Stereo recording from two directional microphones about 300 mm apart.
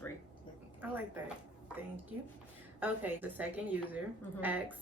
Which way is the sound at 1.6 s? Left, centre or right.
Centre.